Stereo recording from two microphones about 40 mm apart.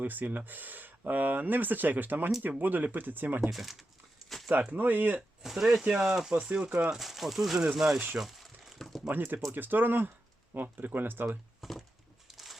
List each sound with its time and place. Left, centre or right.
0.0 s speech: right
3.5 s speech: centre
4.7 s speech: right
5.4 s speech: centre
6.3 s speech: right
6.9 s speech: centre
7.6 s speech: centre
8.2 s a sound: centre
9.1 s speech: right
11.6 s a sound: centre